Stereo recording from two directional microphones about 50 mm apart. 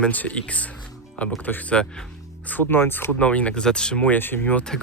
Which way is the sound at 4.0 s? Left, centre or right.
Left.